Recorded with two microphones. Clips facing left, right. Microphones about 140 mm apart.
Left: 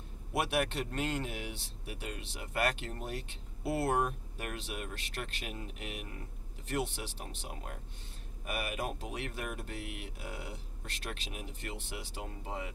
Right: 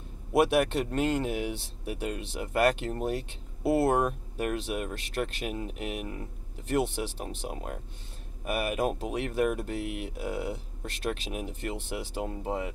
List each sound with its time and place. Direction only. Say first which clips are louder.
0.3 s speech: right 9 dB; 50° right (ahead or behind)